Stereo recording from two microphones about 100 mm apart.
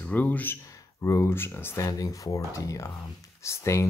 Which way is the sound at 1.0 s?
30° left (ahead or behind).